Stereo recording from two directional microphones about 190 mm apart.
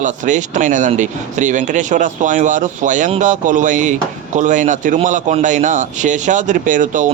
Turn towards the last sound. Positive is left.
turn(degrees=-40)  # may be behind; listen again after turning